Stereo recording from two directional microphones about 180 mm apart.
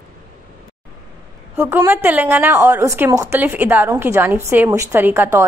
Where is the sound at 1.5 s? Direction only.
15° right (ahead or behind).